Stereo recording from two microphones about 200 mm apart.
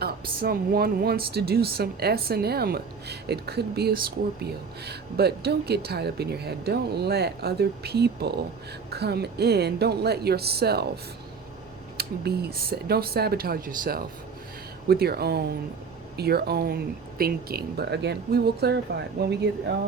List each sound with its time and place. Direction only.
0.0 s speech: 50° right (ahead or behind)
11.9 s speech: 55° right (ahead or behind)